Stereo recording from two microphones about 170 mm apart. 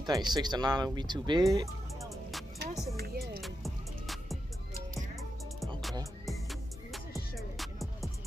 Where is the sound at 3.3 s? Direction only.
Centre (ahead or behind).